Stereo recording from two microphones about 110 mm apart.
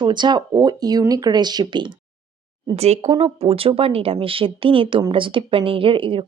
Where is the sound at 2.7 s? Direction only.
75° right (ahead or behind).